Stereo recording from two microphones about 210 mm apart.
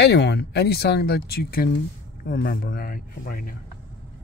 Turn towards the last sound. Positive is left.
turn(degrees=45)  # may be behind; listen again after turning